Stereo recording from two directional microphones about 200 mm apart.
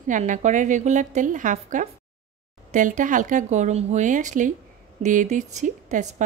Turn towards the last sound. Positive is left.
turn(degrees=-35)  # may be behind; listen again after turning